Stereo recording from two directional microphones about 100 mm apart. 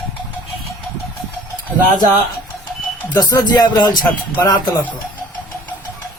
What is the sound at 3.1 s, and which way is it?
Speech, 45° left (ahead or behind).